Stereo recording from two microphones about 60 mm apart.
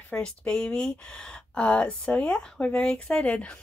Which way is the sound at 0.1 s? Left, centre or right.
Left.